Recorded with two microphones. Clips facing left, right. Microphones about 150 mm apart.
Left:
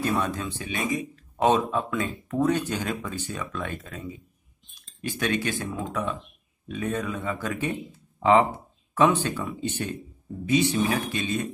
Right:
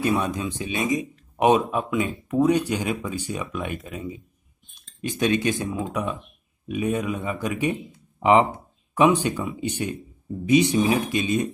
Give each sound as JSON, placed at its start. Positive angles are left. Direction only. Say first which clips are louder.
{"t": 0.0, "sound": "speech", "louder": "right 3 dB", "side_deg": -15}